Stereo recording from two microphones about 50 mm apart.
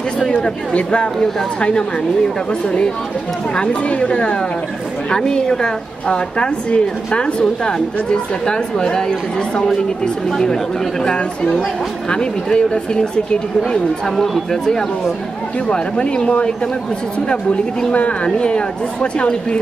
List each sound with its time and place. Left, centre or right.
0.3 s a woman's voice: left
10.3 s a woman's voice: centre
14.1 s a woman's voice: centre
17.9 s speech: left